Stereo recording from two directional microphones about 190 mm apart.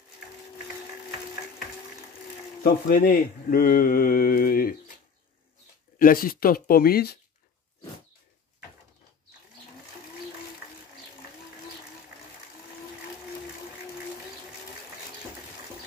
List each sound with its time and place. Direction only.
2.6 s speech: 50° left (ahead or behind)
5.9 s speech: 50° left (ahead or behind)